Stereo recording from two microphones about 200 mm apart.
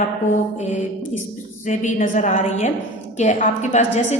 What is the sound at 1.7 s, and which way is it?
A woman's voice, 40° left (ahead or behind).